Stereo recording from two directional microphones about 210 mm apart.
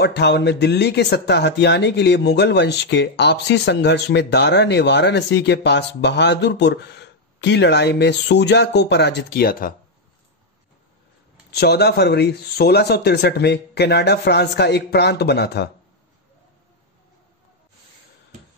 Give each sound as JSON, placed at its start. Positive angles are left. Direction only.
{"t": 0.0, "sound": "speech", "side_deg": 50}
{"t": 11.5, "sound": "speech", "side_deg": 50}